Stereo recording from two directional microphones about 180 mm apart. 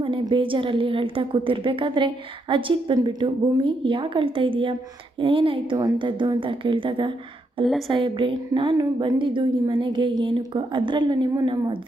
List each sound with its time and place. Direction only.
0.0 s a woman's voice: 30° right (ahead or behind)